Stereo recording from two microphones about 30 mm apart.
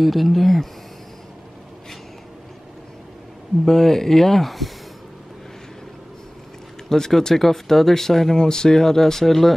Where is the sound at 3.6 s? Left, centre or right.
Centre.